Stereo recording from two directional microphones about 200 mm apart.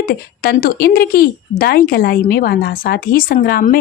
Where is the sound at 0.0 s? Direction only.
45° left (ahead or behind).